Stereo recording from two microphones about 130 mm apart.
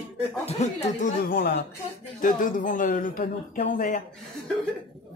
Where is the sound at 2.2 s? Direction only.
90° left.